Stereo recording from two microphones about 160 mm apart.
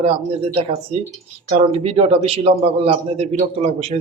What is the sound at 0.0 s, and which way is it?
A man's voice, 35° right (ahead or behind).